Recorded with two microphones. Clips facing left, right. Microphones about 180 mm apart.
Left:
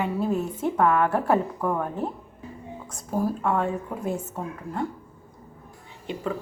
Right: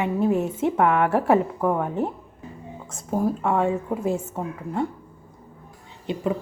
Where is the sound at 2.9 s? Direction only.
25° right (ahead or behind).